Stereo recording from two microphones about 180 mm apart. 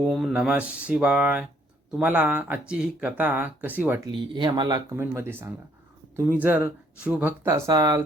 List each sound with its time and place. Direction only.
0.0 s speech: 5° right (ahead or behind)
4.0 s speech: 25° right (ahead or behind)
4.9 s speech: 15° right (ahead or behind)